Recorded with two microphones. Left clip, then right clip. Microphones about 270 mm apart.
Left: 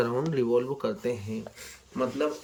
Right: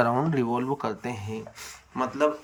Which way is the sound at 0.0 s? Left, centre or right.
Centre.